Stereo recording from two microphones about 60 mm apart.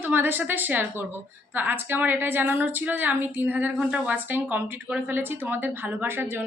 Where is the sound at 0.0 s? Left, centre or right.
Right.